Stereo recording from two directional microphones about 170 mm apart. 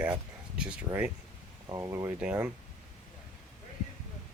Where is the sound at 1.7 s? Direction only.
20° right (ahead or behind).